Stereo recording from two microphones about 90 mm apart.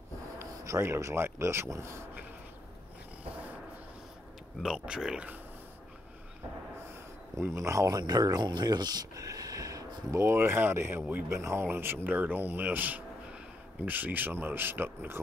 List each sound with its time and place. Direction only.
0.4 s speech: 30° right (ahead or behind)
3.3 s a sound: 15° right (ahead or behind)
4.6 s speech: 10° right (ahead or behind)
7.3 s speech: 30° right (ahead or behind)
8.0 s speech: 45° right (ahead or behind); by 11.2 s 20° right (ahead or behind)
11.2 s speech: 30° right (ahead or behind)